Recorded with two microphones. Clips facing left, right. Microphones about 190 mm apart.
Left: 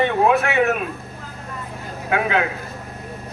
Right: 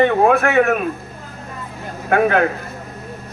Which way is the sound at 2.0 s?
50° right (ahead or behind).